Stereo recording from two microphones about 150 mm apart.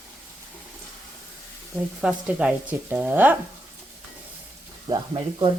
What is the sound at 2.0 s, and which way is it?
Speech, 10° right (ahead or behind).